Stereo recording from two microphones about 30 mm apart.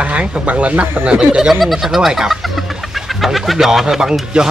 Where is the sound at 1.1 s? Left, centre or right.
Right.